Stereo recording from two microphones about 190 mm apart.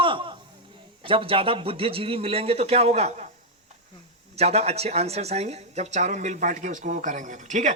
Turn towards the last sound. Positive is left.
turn(degrees=-40)  # may be behind; listen again after turning